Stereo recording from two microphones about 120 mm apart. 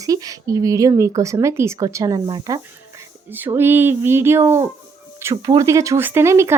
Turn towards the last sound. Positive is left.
turn(degrees=-25)  # may be behind; listen again after turning